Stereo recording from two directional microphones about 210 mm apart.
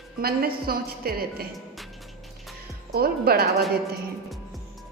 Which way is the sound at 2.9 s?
45° right (ahead or behind).